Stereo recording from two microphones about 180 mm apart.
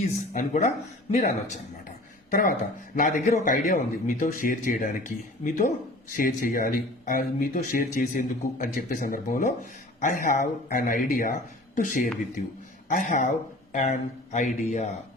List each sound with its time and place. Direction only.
0.3 s speech: 40° left (ahead or behind)
2.3 s speech: 50° left (ahead or behind)
6.1 s speech: 50° left (ahead or behind)